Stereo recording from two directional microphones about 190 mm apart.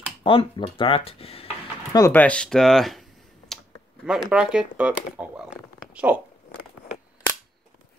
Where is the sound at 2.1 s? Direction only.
5° left (ahead or behind).